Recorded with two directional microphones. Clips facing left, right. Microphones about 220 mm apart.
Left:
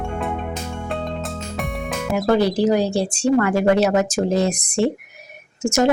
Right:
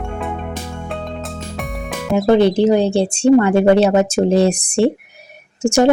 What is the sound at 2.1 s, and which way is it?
A woman's voice, 25° right (ahead or behind).